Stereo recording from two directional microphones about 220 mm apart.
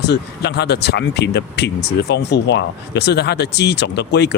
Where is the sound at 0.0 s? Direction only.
50° left (ahead or behind).